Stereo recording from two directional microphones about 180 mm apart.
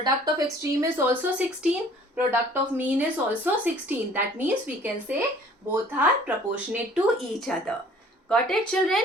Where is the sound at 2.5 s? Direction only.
10° right (ahead or behind).